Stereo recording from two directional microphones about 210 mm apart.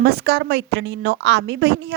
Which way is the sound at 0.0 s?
50° right (ahead or behind).